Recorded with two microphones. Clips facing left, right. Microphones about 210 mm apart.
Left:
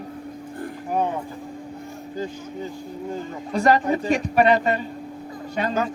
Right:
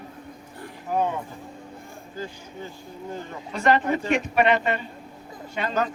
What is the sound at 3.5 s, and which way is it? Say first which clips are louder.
Speech: left 2 dB; 35° left (ahead or behind).